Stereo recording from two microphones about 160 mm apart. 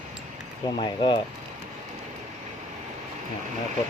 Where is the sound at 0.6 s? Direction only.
30° left (ahead or behind).